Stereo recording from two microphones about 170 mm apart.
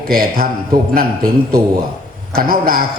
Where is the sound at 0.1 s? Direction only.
60° right (ahead or behind).